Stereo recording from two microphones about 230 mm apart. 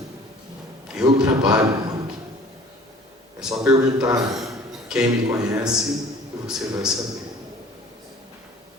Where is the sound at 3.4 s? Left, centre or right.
Centre.